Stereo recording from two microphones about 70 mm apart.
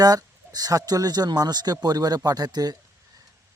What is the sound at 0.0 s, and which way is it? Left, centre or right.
Speech, right.